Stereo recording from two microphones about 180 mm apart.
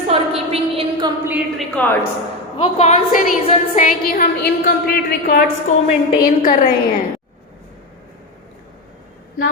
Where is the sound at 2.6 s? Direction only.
35° left (ahead or behind).